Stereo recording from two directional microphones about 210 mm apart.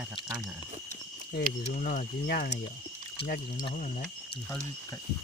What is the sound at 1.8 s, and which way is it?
Speech, 40° left (ahead or behind).